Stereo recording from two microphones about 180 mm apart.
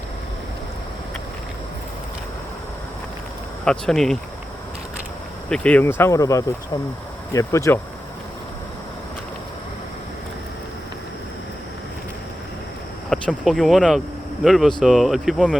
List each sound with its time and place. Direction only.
3.6 s speech: 5° left (ahead or behind)
5.5 s speech: 5° left (ahead or behind)
13.1 s speech: centre (ahead or behind)